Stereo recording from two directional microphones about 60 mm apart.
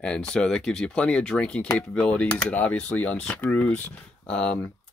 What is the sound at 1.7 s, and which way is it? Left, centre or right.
Speech, left.